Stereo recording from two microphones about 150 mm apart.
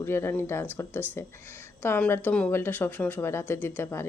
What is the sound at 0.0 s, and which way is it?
Speech, 15° left (ahead or behind).